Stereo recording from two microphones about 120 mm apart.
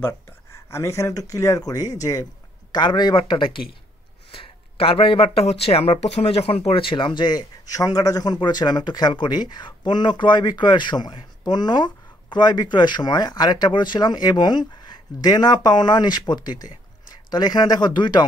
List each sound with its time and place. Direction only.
0.0 s speech: 20° left (ahead or behind); by 18.2 s 40° left (ahead or behind)